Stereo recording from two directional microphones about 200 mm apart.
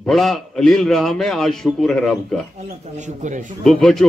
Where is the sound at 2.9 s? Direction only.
35° right (ahead or behind).